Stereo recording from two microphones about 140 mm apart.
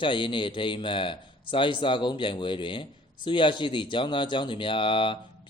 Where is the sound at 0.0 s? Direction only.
35° left (ahead or behind).